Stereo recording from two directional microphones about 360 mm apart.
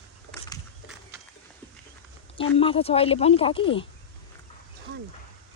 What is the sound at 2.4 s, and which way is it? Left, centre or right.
Speech, centre.